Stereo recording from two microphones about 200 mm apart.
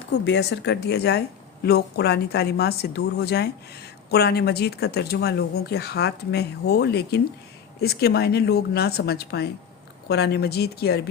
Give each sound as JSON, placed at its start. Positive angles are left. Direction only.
{"t": 0.3, "sound": "a woman's voice", "side_deg": 60}